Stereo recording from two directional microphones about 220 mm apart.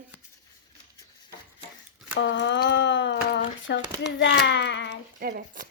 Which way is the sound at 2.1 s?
55° left (ahead or behind).